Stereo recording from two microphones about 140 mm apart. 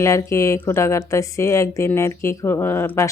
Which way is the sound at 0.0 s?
20° left (ahead or behind).